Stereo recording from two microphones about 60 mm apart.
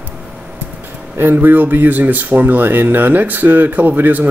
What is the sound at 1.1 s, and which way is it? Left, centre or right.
Speech, right.